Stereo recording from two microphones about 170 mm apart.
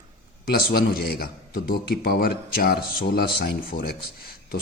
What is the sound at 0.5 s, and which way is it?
Speech, 65° left (ahead or behind).